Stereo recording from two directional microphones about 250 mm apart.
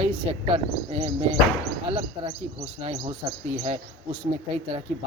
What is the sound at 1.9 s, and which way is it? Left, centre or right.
Speech, right.